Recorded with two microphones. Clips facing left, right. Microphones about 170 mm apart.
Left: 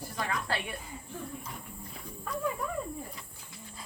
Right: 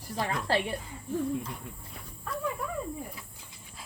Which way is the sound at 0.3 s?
30° right (ahead or behind).